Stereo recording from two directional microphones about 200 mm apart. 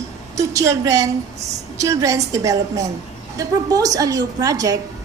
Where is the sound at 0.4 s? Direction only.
15° right (ahead or behind).